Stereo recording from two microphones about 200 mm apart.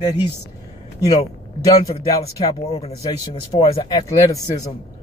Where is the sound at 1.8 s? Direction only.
15° left (ahead or behind).